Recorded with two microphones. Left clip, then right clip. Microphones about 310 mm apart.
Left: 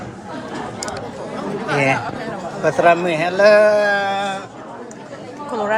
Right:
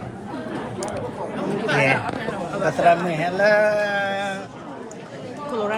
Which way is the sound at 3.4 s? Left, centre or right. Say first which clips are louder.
Left 6 dB; centre.